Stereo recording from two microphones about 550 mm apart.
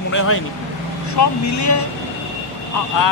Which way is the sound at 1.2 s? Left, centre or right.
Left.